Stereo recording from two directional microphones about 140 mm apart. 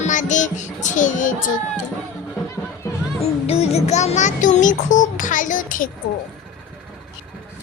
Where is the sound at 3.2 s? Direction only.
50° left (ahead or behind); by 5.9 s 70° left (ahead or behind).